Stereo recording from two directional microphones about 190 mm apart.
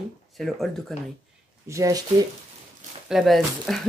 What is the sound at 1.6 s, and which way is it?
Speech, 15° right (ahead or behind).